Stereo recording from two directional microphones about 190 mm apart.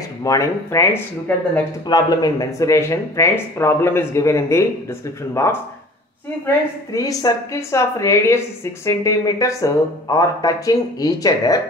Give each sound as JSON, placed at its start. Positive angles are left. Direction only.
{"t": 0.2, "sound": "a woman's voice", "side_deg": 15}